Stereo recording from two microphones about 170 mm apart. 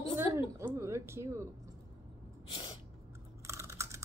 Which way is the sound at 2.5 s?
35° left (ahead or behind).